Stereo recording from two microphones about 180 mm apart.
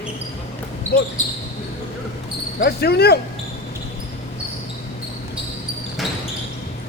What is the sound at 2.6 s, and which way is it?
Speech, 65° left (ahead or behind).